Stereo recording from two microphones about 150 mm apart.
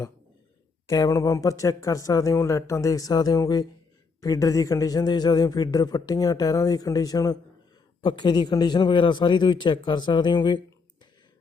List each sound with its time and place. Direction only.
0.9 s a man's voice: 25° left (ahead or behind)